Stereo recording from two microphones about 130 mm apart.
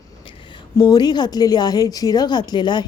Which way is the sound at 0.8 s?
30° left (ahead or behind).